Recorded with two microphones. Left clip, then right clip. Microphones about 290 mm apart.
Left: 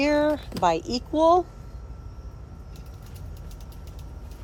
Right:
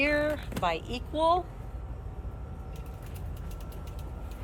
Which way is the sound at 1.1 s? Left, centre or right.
Left.